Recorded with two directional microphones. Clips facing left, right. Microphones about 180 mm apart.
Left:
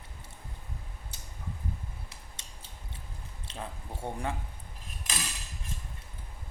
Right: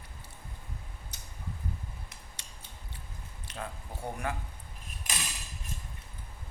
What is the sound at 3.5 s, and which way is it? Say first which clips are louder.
Speech: even; 25° left (ahead or behind).